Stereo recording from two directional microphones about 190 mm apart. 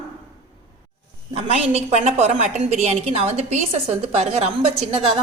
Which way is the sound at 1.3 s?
30° right (ahead or behind).